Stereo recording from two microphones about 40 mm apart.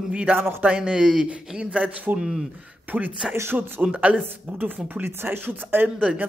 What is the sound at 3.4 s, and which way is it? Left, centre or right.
Speech, right.